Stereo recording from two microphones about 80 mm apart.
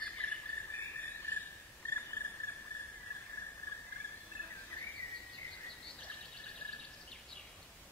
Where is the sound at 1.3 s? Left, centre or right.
Left.